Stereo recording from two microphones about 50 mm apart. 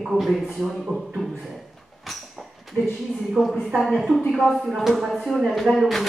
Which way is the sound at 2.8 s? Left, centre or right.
Left.